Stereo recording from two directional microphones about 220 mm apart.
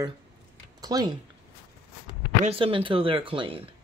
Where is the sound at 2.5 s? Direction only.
25° right (ahead or behind).